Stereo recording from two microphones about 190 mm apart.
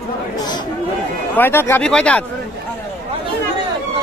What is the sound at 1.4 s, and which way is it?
Speech, 10° left (ahead or behind).